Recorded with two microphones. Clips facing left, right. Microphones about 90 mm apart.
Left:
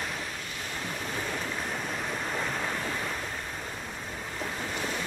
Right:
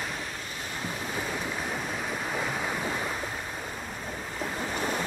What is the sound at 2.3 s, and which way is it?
Waves, 5° right (ahead or behind).